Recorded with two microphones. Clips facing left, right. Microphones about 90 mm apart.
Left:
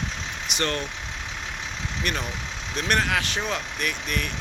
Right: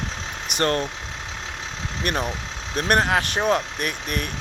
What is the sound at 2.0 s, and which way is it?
Speech, 35° right (ahead or behind).